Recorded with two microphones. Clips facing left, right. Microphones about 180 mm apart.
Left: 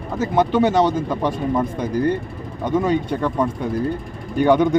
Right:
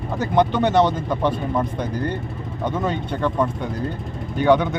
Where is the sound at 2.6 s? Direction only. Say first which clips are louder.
Left 5 dB; 10° left (ahead or behind).